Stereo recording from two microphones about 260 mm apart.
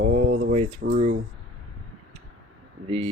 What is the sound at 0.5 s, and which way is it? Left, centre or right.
Speech, right.